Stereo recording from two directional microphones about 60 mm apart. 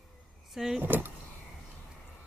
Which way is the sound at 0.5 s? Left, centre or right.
Centre.